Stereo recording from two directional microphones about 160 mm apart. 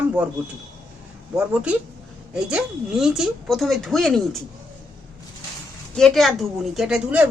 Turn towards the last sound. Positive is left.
turn(degrees=-5)  # may be behind; listen again after turning